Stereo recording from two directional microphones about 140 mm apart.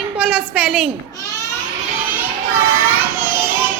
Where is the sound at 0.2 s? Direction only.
5° right (ahead or behind).